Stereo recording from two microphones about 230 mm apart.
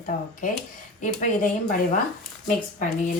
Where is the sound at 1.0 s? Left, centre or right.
Left.